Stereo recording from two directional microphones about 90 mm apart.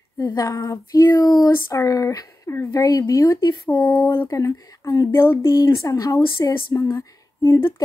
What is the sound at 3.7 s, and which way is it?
Speech, 20° left (ahead or behind).